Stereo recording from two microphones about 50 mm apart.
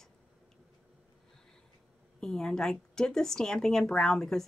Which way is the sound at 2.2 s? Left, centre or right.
Centre.